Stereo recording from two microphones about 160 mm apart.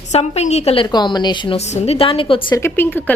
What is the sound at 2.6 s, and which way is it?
Speech, 10° left (ahead or behind).